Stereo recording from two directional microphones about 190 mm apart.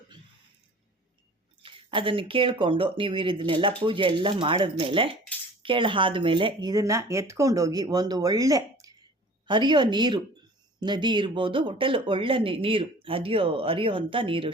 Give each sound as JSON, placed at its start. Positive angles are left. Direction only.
{"t": 1.6, "sound": "speech", "side_deg": -30}